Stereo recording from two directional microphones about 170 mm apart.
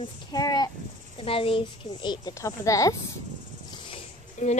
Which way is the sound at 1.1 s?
35° left (ahead or behind).